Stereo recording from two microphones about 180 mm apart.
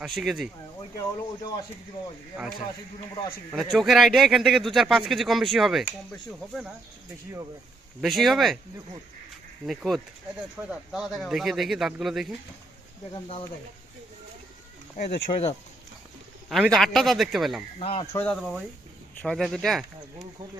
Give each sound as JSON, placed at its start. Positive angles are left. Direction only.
{"t": 0.0, "sound": "a man's voice", "side_deg": 0}
{"t": 0.9, "sound": "speech", "side_deg": 20}
{"t": 3.5, "sound": "a man's voice", "side_deg": 0}
{"t": 8.0, "sound": "a man's voice", "side_deg": 0}
{"t": 9.6, "sound": "a man's voice", "side_deg": 0}
{"t": 13.1, "sound": "speech", "side_deg": 30}
{"t": 15.0, "sound": "speech", "side_deg": 35}
{"t": 16.5, "sound": "a man's voice", "side_deg": 0}
{"t": 17.7, "sound": "speech", "side_deg": 30}
{"t": 18.1, "sound": "a man's voice", "side_deg": 10}